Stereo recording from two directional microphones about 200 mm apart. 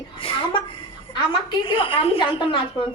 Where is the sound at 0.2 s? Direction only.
25° left (ahead or behind).